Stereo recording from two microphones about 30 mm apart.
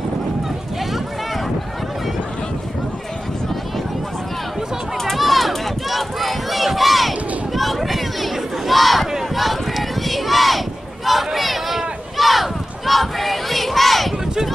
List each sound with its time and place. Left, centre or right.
5.1 s run: centre
9.3 s a sound: centre
12.2 s crowd: centre